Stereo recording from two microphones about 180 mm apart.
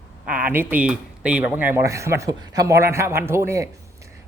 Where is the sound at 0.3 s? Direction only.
10° right (ahead or behind).